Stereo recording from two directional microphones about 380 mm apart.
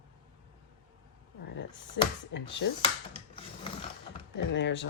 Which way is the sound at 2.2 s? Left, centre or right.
Left.